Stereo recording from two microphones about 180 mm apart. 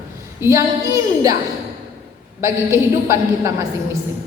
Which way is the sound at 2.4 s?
15° right (ahead or behind).